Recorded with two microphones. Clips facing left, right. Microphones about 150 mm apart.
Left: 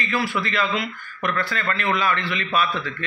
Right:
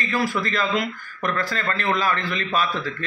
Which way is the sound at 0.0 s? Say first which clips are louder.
Right 1 dB; 40° right (ahead or behind).